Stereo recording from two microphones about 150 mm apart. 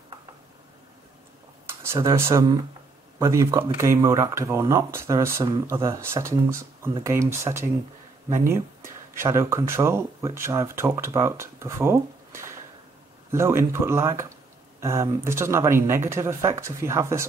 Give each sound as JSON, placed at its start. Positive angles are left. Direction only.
{"t": 1.7, "sound": "speech", "side_deg": -15}